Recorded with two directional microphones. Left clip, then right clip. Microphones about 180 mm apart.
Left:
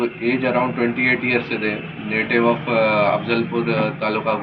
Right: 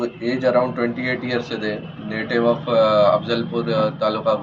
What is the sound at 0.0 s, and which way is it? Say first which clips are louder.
A man's voice: even; 15° right (ahead or behind).